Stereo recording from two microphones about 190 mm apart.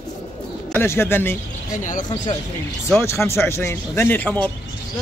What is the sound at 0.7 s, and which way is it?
Speech, 10° left (ahead or behind).